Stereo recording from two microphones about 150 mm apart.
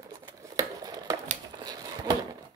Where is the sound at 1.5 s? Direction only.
25° right (ahead or behind).